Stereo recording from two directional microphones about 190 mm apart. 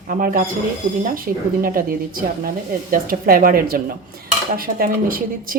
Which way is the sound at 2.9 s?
50° right (ahead or behind).